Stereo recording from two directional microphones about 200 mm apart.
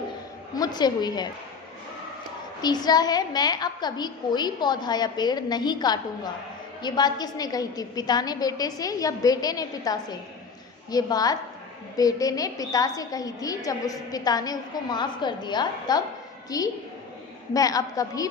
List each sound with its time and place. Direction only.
0.5 s a woman's voice: 20° left (ahead or behind)
2.6 s a woman's voice: 20° left (ahead or behind)